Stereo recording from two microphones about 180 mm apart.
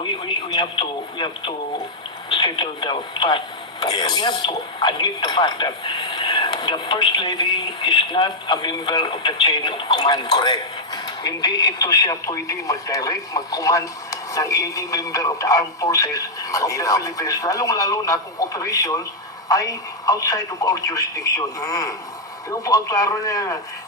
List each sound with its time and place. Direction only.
0.0 s speech: 25° left (ahead or behind)